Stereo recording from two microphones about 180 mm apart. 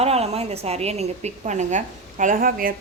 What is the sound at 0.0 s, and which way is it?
A woman's voice, 35° right (ahead or behind).